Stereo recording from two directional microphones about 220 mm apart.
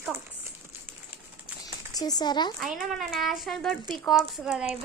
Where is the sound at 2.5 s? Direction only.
Centre (ahead or behind).